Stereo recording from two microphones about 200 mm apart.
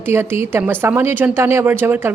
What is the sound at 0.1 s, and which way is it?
Speech, 10° right (ahead or behind).